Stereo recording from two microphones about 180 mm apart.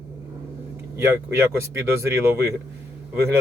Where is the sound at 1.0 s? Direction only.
15° right (ahead or behind).